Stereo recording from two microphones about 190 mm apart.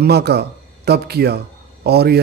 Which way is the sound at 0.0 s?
60° right (ahead or behind).